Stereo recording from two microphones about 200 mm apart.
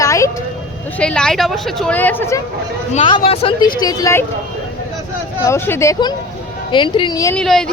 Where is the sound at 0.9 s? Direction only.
5° left (ahead or behind).